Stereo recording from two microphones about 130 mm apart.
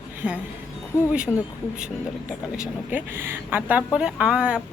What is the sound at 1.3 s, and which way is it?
Speech, 10° left (ahead or behind).